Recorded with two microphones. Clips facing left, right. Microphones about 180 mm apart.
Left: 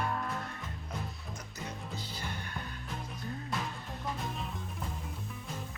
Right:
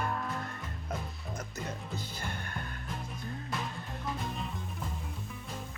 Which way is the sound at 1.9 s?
50° right (ahead or behind).